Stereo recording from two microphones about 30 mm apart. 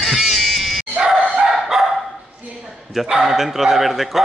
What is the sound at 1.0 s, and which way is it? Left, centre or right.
Dog, centre.